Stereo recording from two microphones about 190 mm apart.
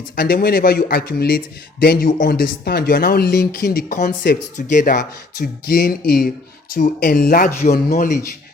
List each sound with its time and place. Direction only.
0.2 s speech: 50° left (ahead or behind)
4.9 s speech: 50° left (ahead or behind)